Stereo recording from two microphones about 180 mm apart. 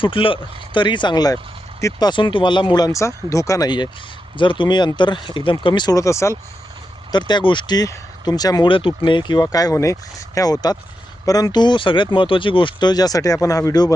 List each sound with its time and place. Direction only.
0.0 s speech: 30° left (ahead or behind)